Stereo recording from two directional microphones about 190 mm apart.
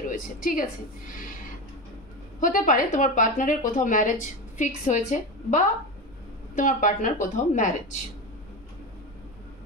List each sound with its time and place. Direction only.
0.1 s a woman's voice: 45° left (ahead or behind)
2.4 s a woman's voice: 45° left (ahead or behind)